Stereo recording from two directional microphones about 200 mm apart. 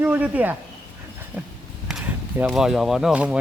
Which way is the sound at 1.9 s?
5° right (ahead or behind).